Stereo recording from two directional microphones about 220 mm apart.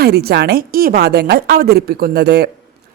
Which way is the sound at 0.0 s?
45° right (ahead or behind).